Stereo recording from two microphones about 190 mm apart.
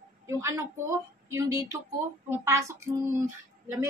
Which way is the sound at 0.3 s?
15° right (ahead or behind).